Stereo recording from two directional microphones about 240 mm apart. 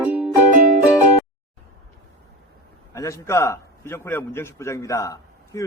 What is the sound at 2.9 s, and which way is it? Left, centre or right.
A man's voice, centre.